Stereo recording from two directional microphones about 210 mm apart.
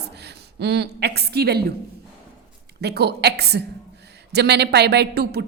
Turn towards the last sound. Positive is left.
turn(degrees=-50)  # may be behind; listen again after turning